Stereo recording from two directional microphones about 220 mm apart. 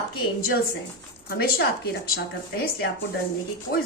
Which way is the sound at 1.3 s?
45° left (ahead or behind).